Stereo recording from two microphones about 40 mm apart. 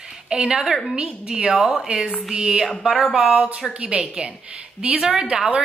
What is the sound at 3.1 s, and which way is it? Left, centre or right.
Speech, right.